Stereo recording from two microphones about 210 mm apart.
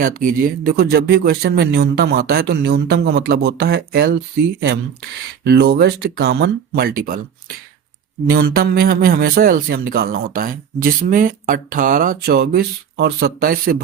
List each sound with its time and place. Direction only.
0.0 s speech: 40° right (ahead or behind)
5.5 s speech: 50° right (ahead or behind)
8.3 s speech: 45° right (ahead or behind)